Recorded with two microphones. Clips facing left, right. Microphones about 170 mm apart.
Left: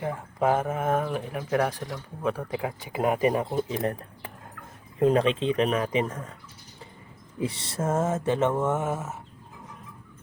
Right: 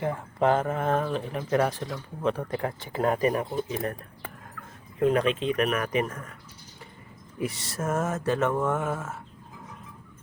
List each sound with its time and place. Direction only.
0.0 s speech: 5° left (ahead or behind)
3.7 s speech: 30° left (ahead or behind)
4.9 s speech: 30° left (ahead or behind)
7.3 s speech: 30° left (ahead or behind)